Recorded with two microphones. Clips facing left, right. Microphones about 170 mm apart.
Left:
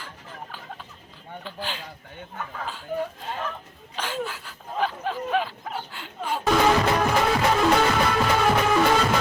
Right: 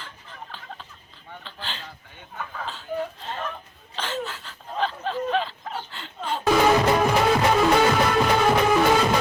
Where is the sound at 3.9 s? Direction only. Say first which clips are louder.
Even; 10° left (ahead or behind).